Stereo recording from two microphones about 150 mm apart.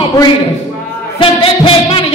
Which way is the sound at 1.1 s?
35° left (ahead or behind).